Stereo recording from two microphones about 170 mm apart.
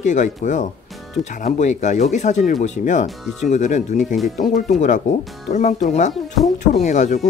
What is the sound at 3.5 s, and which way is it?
Speech, 45° left (ahead or behind).